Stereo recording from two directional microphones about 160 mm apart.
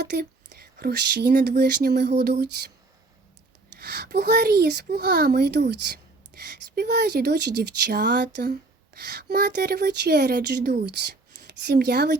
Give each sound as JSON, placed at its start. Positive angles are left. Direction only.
{"t": 0.0, "sound": "speech", "side_deg": -90}
{"t": 3.8, "sound": "speech", "side_deg": -90}